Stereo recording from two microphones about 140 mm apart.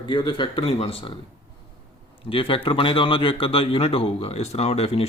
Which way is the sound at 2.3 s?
40° left (ahead or behind).